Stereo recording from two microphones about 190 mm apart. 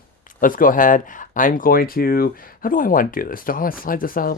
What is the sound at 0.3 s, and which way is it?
Speech, 45° left (ahead or behind).